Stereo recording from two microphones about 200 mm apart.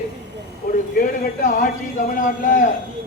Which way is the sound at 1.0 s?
45° left (ahead or behind).